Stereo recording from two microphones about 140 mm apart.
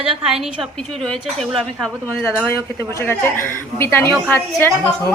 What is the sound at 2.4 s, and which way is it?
A woman's voice, 15° left (ahead or behind).